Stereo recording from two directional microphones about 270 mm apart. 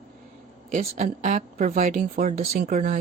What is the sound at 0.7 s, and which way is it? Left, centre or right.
Speech, right.